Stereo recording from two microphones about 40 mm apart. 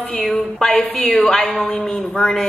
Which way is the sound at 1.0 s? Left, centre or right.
Left.